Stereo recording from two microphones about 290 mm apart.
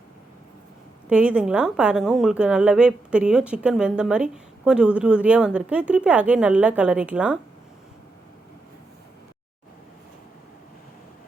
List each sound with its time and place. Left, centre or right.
1.1 s a woman's voice: centre